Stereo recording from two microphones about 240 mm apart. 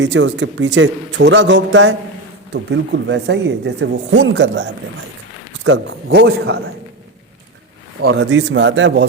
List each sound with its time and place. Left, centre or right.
0.0 s speech: right
8.0 s speech: right